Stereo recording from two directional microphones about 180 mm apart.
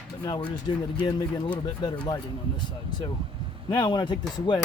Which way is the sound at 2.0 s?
25° left (ahead or behind).